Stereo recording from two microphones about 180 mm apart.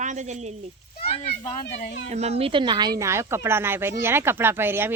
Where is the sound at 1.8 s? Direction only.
75° left (ahead or behind).